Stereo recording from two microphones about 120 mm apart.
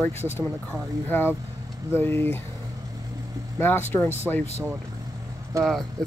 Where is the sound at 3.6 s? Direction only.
15° left (ahead or behind).